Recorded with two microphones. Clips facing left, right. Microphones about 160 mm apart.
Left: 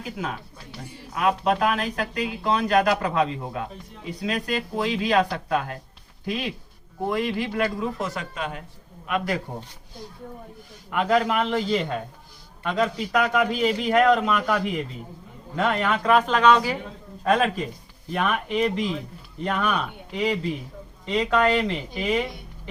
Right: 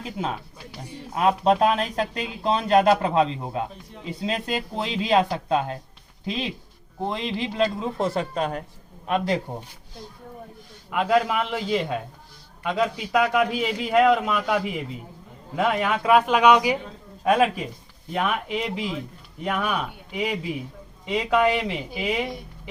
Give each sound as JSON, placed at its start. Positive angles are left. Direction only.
{"t": 0.2, "sound": "speech", "side_deg": -25}
{"t": 7.1, "sound": "speech", "side_deg": -25}
{"t": 10.9, "sound": "a man's voice", "side_deg": -5}